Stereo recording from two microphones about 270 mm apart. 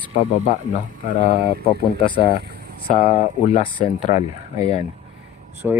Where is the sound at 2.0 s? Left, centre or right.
Centre.